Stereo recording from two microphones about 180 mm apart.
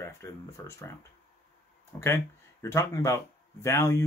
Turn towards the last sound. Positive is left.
turn(degrees=15)  # may be behind; listen again after turning